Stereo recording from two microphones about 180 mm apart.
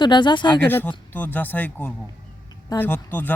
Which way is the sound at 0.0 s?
25° left (ahead or behind).